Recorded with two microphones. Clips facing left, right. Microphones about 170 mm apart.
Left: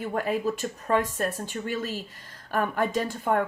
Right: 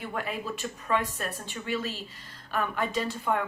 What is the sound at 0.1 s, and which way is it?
A woman's voice, 40° left (ahead or behind).